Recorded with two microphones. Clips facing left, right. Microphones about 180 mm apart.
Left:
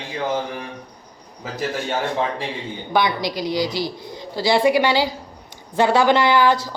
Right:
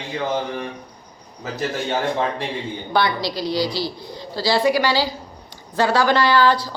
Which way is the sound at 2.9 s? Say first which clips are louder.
Left 1 dB; 15° left (ahead or behind).